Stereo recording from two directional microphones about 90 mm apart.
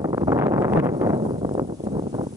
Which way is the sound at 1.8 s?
90° right.